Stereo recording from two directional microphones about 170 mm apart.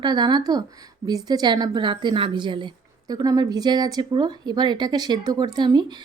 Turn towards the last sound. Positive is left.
turn(degrees=-25)  # may be behind; listen again after turning